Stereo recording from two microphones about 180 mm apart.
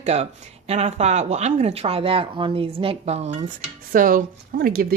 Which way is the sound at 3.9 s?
50° right (ahead or behind).